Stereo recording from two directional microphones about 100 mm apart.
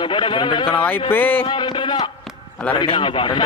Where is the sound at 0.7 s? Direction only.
20° left (ahead or behind).